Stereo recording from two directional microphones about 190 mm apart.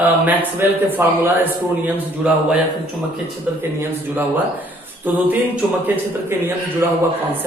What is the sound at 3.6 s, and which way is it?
A man's voice, 10° right (ahead or behind).